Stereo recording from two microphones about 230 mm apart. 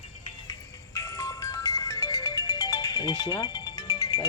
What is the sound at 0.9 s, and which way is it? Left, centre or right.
Ringtone, centre.